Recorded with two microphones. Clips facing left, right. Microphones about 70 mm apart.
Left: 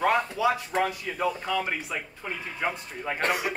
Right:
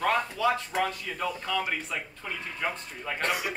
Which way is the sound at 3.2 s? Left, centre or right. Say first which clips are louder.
Left 3 dB; left.